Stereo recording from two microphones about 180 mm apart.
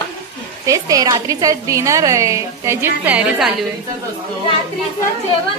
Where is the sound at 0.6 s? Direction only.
20° right (ahead or behind).